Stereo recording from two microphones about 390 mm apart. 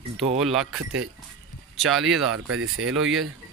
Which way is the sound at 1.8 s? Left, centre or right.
Centre.